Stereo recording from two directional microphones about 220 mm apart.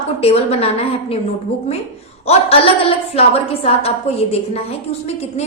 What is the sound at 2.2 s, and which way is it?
A woman's voice, 25° left (ahead or behind).